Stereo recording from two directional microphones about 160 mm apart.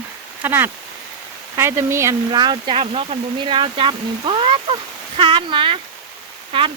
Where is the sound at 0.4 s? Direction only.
15° right (ahead or behind).